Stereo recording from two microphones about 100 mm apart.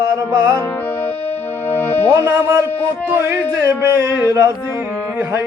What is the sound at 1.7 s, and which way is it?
Music, 20° left (ahead or behind).